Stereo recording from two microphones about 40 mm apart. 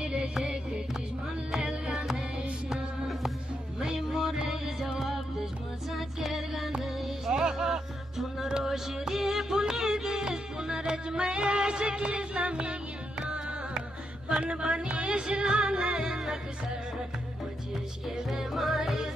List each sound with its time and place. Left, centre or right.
0.0 s music: right
3.8 s music: centre
8.5 s music: centre
14.4 s a sound: right
15.0 s music: right
18.3 s music: centre